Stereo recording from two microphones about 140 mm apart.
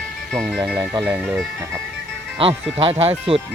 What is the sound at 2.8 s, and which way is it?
Speech, 45° right (ahead or behind).